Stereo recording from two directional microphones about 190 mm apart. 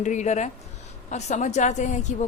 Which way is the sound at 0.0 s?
40° left (ahead or behind).